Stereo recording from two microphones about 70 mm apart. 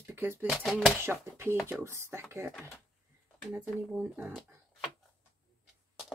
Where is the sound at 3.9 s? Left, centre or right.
Centre.